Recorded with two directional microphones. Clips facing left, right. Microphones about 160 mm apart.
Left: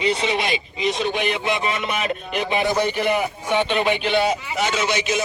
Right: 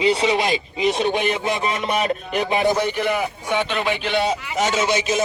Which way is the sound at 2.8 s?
10° left (ahead or behind).